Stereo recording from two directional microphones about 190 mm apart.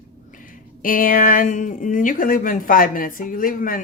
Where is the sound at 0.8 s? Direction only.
50° left (ahead or behind).